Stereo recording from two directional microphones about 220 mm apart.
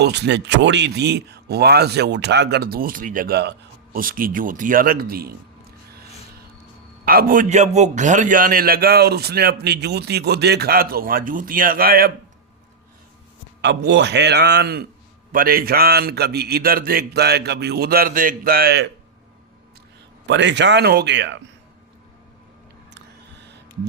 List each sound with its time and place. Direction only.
0.0 s a man's voice: 50° right (ahead or behind)
7.0 s a man's voice: 40° right (ahead or behind)
13.6 s a man's voice: 50° right (ahead or behind)
20.2 s a man's voice: 55° right (ahead or behind)
23.0 s a sound: 50° right (ahead or behind)